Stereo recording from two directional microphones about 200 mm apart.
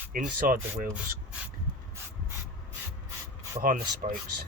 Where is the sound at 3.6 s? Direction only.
45° right (ahead or behind).